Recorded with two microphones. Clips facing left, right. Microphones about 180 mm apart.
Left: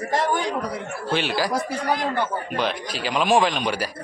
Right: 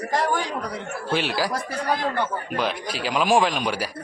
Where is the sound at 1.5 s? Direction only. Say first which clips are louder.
Left 2 dB; 15° left (ahead or behind).